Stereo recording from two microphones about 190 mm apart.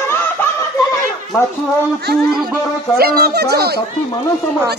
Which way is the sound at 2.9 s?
55° right (ahead or behind).